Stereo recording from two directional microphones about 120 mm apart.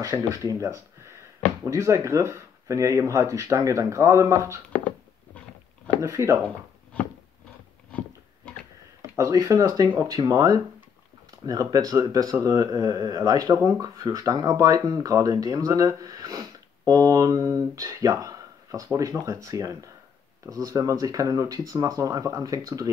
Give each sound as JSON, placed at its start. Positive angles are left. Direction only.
{"t": 0.0, "sound": "speech", "side_deg": -25}
{"t": 5.9, "sound": "speech", "side_deg": -25}
{"t": 9.1, "sound": "speech", "side_deg": -30}